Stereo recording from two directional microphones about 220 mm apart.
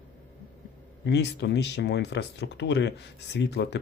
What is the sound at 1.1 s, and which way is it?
Speech, 50° left (ahead or behind).